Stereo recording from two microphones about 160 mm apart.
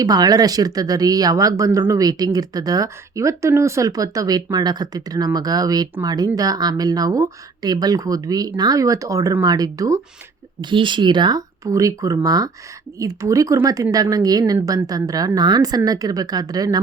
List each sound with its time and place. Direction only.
0.0 s speech: 25° right (ahead or behind)